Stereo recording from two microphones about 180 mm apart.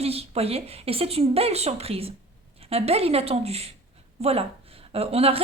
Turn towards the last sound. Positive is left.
turn(degrees=-35)  # may be behind; listen again after turning